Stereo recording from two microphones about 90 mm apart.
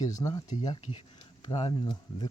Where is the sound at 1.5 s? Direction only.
60° left (ahead or behind).